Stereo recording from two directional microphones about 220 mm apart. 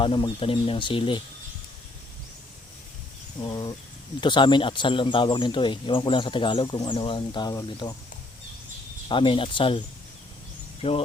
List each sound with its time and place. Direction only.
0.0 s speech: 20° left (ahead or behind)
3.4 s speech: 20° left (ahead or behind)
9.0 s speech: 25° left (ahead or behind)